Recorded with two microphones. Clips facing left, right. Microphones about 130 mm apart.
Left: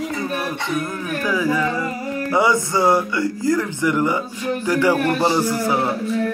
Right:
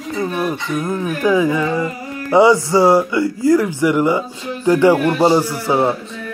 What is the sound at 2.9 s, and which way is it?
Speech, 25° right (ahead or behind).